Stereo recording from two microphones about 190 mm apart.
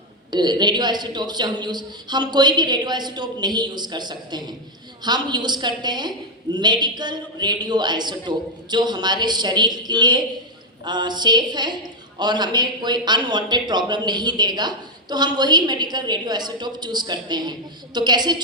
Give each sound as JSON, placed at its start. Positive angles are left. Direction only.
{"t": 0.3, "sound": "a woman's voice", "side_deg": -20}